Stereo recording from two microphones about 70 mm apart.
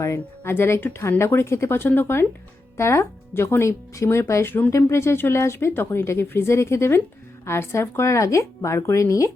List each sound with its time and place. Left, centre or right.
0.0 s speech: left